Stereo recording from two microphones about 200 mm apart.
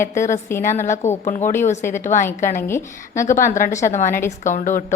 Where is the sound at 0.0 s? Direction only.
35° left (ahead or behind).